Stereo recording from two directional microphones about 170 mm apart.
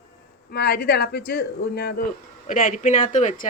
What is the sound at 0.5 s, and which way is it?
Speech, 70° left (ahead or behind).